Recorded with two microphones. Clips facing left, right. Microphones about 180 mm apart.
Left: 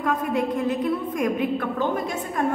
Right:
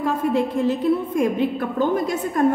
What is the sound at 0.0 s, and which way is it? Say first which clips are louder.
A woman's voice: right 3 dB; 30° right (ahead or behind).